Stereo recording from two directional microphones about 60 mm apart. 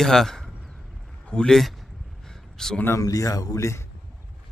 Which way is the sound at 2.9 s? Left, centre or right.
Left.